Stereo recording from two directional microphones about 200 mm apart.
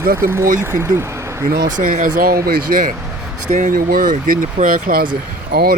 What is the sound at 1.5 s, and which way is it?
Speech, 45° right (ahead or behind).